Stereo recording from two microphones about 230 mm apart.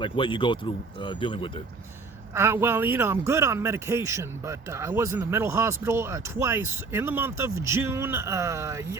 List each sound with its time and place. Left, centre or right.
0.0 s speech: left
2.3 s speech: centre